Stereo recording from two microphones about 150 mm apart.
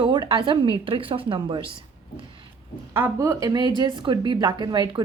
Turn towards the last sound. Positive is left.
turn(degrees=-30)  # may be behind; listen again after turning